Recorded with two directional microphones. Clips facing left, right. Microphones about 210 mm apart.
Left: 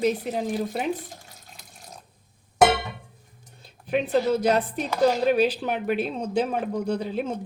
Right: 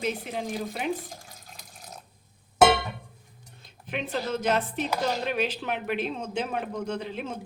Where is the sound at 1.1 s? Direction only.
Centre (ahead or behind).